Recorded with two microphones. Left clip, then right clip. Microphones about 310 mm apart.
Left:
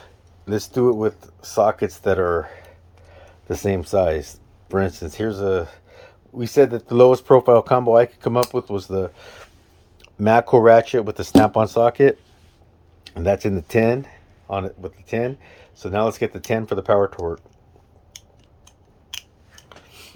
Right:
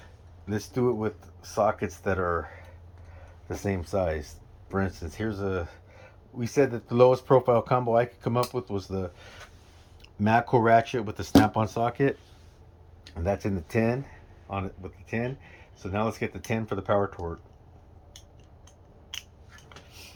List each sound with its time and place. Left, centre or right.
0.0 s speech: centre